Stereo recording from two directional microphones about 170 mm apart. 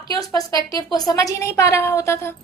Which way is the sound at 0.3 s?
20° left (ahead or behind).